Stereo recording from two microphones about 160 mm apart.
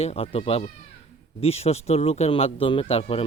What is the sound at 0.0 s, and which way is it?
A man's voice, 40° left (ahead or behind).